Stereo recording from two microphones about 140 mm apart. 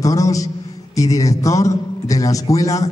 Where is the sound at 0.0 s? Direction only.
25° left (ahead or behind).